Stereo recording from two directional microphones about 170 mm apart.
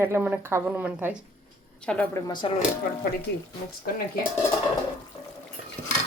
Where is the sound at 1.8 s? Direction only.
5° left (ahead or behind).